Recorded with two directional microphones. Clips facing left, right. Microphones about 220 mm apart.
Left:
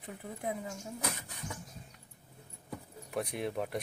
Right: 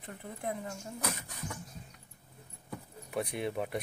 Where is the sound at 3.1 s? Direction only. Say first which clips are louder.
Right 1 dB; centre (ahead or behind).